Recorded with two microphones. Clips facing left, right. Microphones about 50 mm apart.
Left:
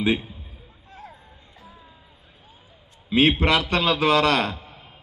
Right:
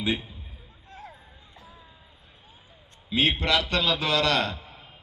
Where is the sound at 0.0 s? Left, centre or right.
Centre.